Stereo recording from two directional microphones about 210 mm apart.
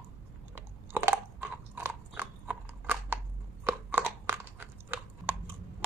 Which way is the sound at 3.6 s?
10° right (ahead or behind).